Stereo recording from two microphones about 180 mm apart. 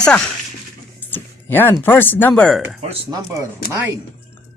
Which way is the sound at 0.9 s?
10° left (ahead or behind).